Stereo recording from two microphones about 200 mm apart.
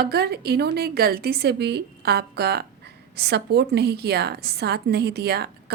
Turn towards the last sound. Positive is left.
turn(degrees=-55)  # may be behind; listen again after turning